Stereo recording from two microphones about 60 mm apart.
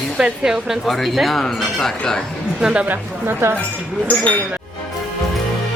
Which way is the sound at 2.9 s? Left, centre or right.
Right.